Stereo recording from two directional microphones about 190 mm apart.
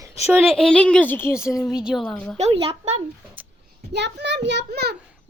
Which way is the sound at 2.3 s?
30° right (ahead or behind).